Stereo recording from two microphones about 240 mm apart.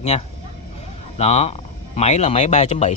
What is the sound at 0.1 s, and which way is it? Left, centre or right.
A man's voice, left.